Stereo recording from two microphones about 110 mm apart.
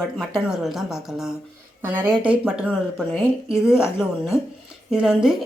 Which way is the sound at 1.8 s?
20° right (ahead or behind).